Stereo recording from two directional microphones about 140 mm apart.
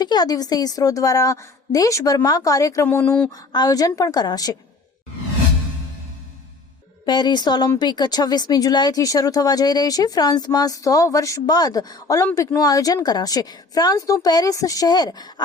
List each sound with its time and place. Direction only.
0.0 s speech: 30° left (ahead or behind); by 3.2 s 10° left (ahead or behind)
3.5 s speech: 30° left (ahead or behind)
7.0 s a woman's voice: 30° left (ahead or behind)